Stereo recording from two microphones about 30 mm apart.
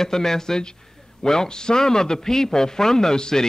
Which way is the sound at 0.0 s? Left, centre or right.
Centre.